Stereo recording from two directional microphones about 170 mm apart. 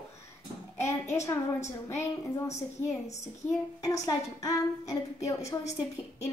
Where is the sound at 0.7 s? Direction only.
15° left (ahead or behind).